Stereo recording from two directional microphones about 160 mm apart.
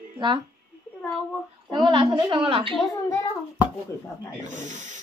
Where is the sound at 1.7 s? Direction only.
30° right (ahead or behind).